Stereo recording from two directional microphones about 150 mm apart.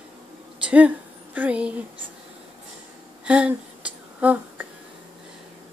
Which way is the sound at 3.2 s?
10° right (ahead or behind).